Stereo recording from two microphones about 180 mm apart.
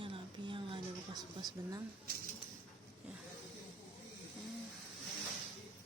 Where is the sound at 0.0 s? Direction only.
30° right (ahead or behind).